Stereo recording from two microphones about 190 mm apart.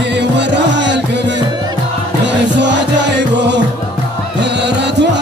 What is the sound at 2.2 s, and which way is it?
Music, 65° right (ahead or behind).